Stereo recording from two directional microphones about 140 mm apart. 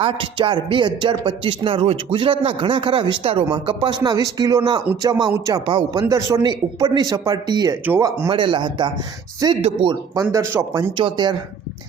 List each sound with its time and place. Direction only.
0.0 s a man's voice: 35° right (ahead or behind)
6.0 s speech: 25° right (ahead or behind)
7.9 s speech: 20° right (ahead or behind)
8.3 s a man's voice: 35° right (ahead or behind)